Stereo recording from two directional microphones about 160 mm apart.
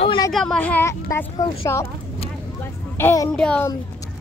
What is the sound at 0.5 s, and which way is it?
Speech, 10° left (ahead or behind).